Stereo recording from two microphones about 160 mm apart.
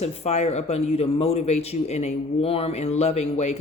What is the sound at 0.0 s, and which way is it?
Speech, 40° left (ahead or behind).